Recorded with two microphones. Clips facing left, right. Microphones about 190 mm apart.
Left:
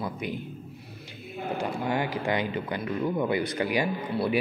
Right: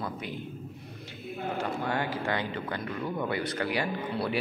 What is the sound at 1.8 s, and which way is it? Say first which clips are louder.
Speech: left 4 dB; 15° left (ahead or behind).